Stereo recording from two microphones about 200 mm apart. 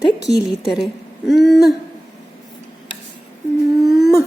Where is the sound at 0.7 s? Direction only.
Centre (ahead or behind).